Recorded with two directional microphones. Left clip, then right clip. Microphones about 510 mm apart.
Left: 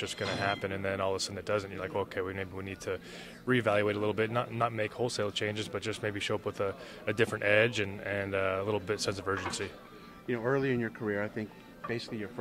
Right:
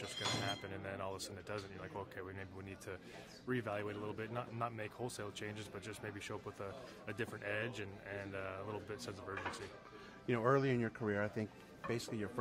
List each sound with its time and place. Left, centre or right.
0.0 s speech: left
10.2 s speech: centre